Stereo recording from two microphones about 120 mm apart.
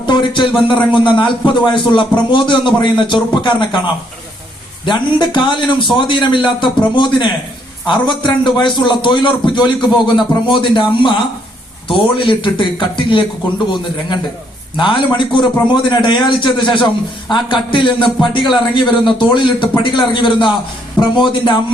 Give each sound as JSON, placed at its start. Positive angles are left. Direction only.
{"t": 0.0, "sound": "a man's voice", "side_deg": 40}
{"t": 4.9, "sound": "a man's voice", "side_deg": 40}
{"t": 14.8, "sound": "a man's voice", "side_deg": 40}